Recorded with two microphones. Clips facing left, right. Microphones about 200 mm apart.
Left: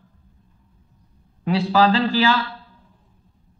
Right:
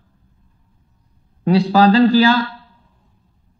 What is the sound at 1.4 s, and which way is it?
Speech, 40° right (ahead or behind).